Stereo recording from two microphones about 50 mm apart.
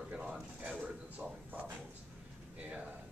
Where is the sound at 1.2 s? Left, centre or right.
Right.